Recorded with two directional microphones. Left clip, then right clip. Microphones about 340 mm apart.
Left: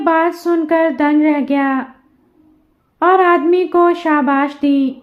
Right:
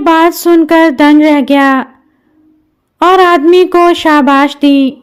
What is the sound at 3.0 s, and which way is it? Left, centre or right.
A man's voice, right.